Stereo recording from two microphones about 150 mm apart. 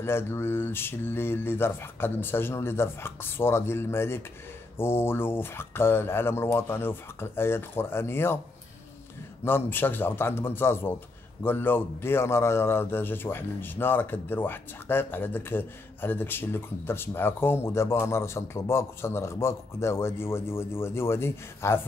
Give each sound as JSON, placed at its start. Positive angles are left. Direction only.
{"t": 0.0, "sound": "a man's voice", "side_deg": 15}
{"t": 9.4, "sound": "a man's voice", "side_deg": 15}